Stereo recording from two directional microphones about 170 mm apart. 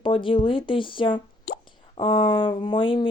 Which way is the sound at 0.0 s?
30° left (ahead or behind).